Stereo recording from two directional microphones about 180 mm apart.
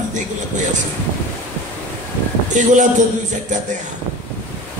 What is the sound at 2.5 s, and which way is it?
Speech, 45° right (ahead or behind).